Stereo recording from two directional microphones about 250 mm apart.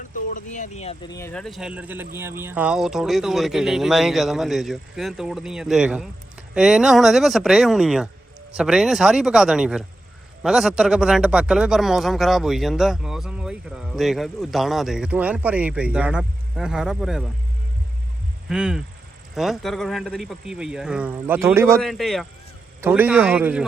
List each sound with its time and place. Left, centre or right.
0.3 s speech: left
1.1 s a man's voice: centre
18.4 s a man's voice: centre
21.8 s a man's voice: centre